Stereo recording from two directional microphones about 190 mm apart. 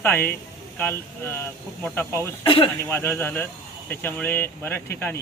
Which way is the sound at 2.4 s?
30° left (ahead or behind).